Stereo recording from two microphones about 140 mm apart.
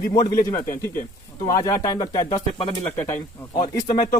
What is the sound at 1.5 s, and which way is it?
Speech, 25° left (ahead or behind).